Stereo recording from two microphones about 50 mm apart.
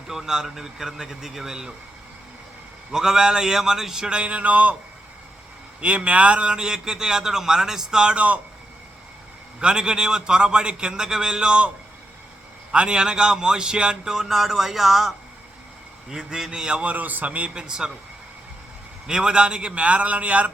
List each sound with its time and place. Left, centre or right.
0.1 s a man's voice: centre
2.9 s a man's voice: centre
4.2 s a man's voice: right
5.8 s a man's voice: right
9.6 s a man's voice: centre
12.7 s a man's voice: centre
17.5 s a man's voice: centre
19.0 s a man's voice: centre